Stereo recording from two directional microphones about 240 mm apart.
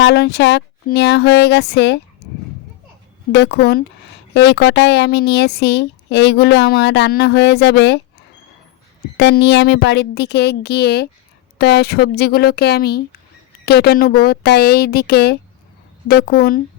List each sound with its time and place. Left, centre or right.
0.0 s speech: left
3.3 s speech: left
9.1 s a woman's voice: left